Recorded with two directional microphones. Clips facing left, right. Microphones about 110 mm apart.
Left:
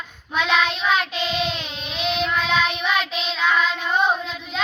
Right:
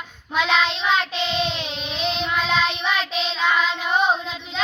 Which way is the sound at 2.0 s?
30° right (ahead or behind).